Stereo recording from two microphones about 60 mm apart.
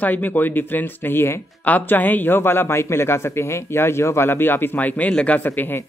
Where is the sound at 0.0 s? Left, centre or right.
Left.